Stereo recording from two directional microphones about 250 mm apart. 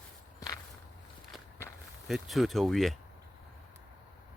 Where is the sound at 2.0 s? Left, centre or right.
Centre.